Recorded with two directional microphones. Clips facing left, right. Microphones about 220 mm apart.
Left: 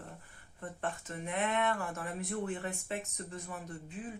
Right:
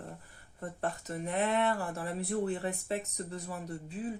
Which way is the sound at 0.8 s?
40° right (ahead or behind).